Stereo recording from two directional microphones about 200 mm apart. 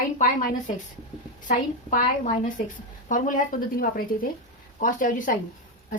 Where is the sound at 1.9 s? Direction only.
40° left (ahead or behind).